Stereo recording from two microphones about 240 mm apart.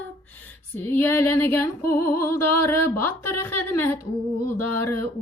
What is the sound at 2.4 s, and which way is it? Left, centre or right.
Music, left.